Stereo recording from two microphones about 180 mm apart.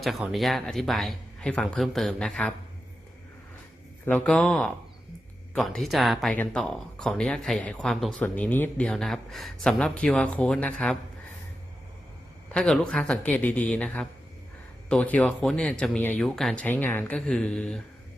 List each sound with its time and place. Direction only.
0.0 s speech: centre (ahead or behind)
4.0 s speech: 10° left (ahead or behind)
12.5 s speech: 5° left (ahead or behind)